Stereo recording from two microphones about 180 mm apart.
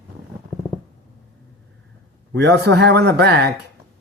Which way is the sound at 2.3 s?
70° right (ahead or behind).